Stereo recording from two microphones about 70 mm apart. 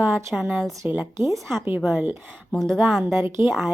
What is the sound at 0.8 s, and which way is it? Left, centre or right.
Speech, right.